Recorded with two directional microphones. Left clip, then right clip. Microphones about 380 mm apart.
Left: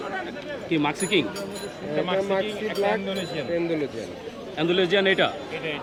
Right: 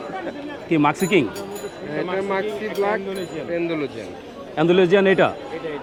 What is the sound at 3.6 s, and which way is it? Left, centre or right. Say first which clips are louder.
A man's voice: right 2 dB; centre.